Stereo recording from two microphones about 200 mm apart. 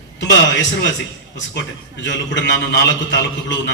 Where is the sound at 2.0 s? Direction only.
65° left (ahead or behind).